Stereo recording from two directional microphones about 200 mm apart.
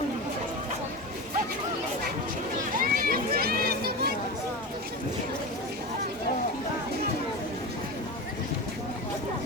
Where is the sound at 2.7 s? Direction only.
45° right (ahead or behind).